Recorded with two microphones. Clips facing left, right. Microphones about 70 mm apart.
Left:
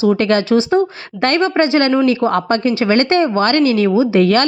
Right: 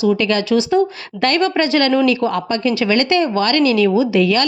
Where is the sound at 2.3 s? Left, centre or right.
Left.